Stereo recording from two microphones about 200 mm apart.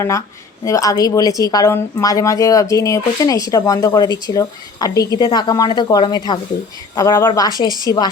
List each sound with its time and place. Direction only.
0.6 s a woman's voice: 15° left (ahead or behind)